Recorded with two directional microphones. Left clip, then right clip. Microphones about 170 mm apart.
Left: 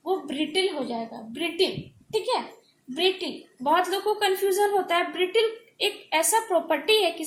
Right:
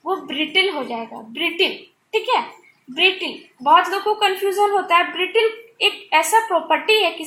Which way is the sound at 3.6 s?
20° left (ahead or behind).